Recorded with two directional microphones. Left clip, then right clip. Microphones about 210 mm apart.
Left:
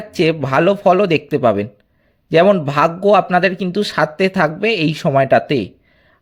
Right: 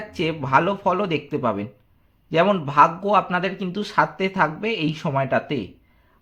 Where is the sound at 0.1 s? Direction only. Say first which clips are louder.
Left 4 dB; 35° left (ahead or behind).